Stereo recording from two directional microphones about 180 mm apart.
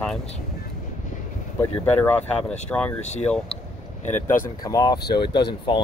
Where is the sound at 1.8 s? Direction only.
10° left (ahead or behind).